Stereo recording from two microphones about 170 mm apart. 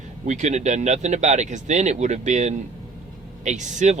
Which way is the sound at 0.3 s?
45° right (ahead or behind).